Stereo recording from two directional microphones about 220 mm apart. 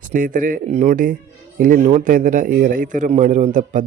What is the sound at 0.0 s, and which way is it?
Speech, 35° right (ahead or behind).